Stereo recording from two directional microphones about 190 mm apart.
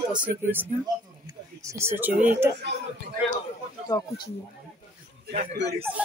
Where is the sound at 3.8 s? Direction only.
20° left (ahead or behind).